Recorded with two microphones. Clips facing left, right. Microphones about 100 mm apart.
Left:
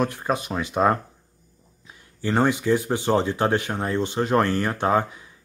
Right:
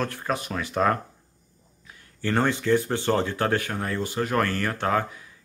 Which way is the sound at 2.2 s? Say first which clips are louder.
Left 2 dB; 15° left (ahead or behind).